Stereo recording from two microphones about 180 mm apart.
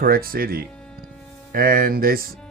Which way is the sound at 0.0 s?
55° right (ahead or behind).